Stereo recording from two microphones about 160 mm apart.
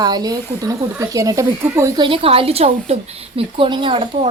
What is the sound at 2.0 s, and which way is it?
A woman's voice, 35° right (ahead or behind).